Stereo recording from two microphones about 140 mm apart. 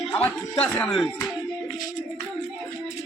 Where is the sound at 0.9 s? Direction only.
5° left (ahead or behind).